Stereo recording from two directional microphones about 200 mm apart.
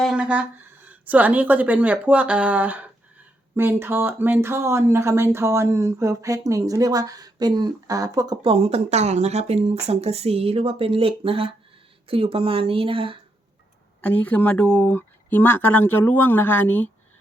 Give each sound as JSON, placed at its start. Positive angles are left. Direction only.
{"t": 0.0, "sound": "a sound", "side_deg": -5}
{"t": 0.9, "sound": "speech", "side_deg": -10}
{"t": 14.0, "sound": "speech", "side_deg": 10}